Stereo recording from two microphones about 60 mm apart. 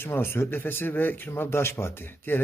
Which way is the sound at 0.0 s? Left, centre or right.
Left.